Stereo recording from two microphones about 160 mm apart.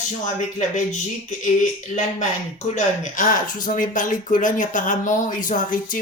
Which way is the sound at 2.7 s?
50° left (ahead or behind).